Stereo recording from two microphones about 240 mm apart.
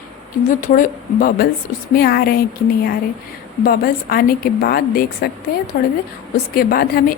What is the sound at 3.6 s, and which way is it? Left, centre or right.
Speech, left.